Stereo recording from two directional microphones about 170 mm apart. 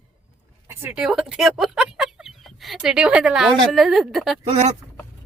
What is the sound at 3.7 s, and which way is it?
Speech, centre (ahead or behind).